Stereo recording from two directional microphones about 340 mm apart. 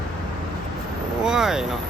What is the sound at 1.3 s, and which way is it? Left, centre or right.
Speech, centre.